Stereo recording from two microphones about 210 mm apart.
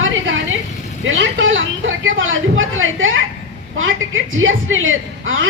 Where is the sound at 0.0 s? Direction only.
65° right (ahead or behind).